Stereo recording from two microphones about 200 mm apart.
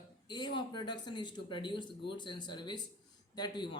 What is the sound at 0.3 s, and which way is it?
A man's voice, 20° left (ahead or behind).